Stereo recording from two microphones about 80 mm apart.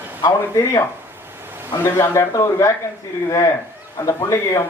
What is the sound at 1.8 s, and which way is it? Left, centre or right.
Speech, left.